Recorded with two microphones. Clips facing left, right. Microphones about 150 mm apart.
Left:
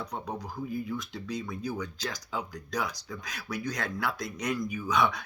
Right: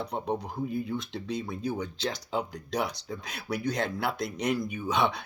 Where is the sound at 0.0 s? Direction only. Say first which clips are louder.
Right 5 dB; 30° right (ahead or behind).